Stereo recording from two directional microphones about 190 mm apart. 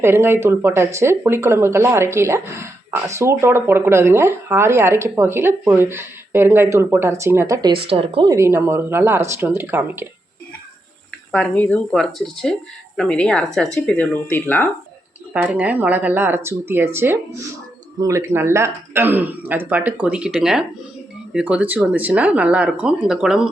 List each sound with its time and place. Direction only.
0.0 s speech: 10° right (ahead or behind)
7.9 s speech: 30° right (ahead or behind)
8.3 s speech: 15° right (ahead or behind)
11.3 s speech: 5° left (ahead or behind)
15.3 s speech: 10° right (ahead or behind)